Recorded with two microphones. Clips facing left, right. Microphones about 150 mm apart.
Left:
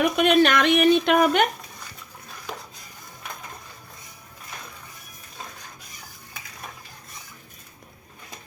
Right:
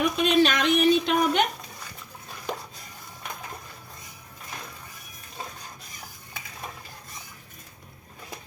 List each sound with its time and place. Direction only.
0.0 s speech: 60° left (ahead or behind)